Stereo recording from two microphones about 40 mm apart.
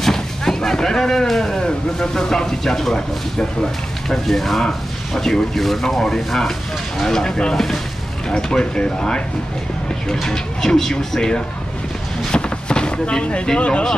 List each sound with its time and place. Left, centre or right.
0.0 s speech: centre
8.3 s speech: centre
10.2 s speech: centre
12.3 s vehicle: left
13.6 s speech: left